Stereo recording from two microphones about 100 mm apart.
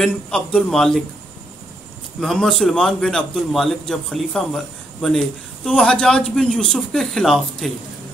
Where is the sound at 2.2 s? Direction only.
5° left (ahead or behind).